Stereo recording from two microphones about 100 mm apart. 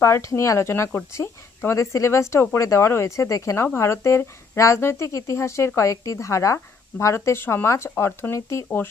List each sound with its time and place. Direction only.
0.0 s speech: 30° left (ahead or behind)